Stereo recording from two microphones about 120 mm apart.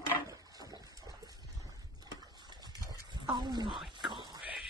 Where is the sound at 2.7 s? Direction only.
30° left (ahead or behind).